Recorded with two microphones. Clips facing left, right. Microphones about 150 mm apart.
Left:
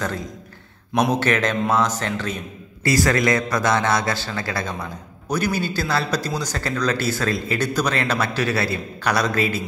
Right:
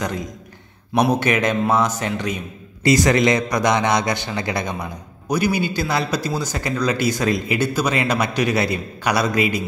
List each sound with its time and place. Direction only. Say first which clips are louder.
0.9 s a man's voice: right 2 dB; 10° right (ahead or behind)